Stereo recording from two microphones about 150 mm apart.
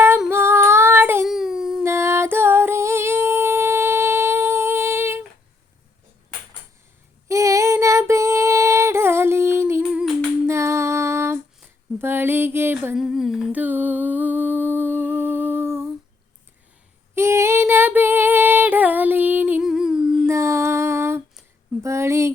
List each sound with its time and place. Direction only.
0.3 s female singing: 15° right (ahead or behind)
1.2 s a sound: centre (ahead or behind)
1.8 s music: 20° right (ahead or behind)
7.3 s female singing: 20° right (ahead or behind)
11.9 s music: 15° right (ahead or behind)
13.0 s humming: centre (ahead or behind)
17.2 s female singing: 20° right (ahead or behind)
20.2 s a sound: 20° right (ahead or behind)